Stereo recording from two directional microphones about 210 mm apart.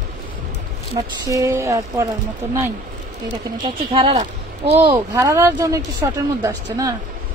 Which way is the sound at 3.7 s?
20° right (ahead or behind).